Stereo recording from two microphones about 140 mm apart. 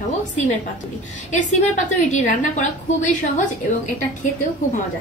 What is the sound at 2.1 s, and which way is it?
A woman's voice, 60° left (ahead or behind).